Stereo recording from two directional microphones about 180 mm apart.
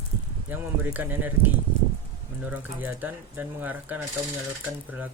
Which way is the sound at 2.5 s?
10° right (ahead or behind).